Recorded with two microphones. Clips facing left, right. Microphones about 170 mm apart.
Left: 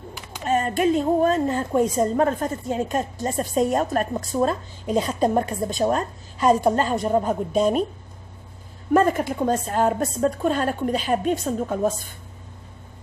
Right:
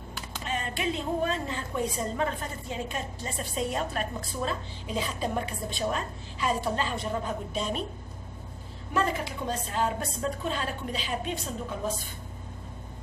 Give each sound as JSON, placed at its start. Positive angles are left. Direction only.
{"t": 0.5, "sound": "a woman's voice", "side_deg": 45}
{"t": 8.9, "sound": "a woman's voice", "side_deg": 50}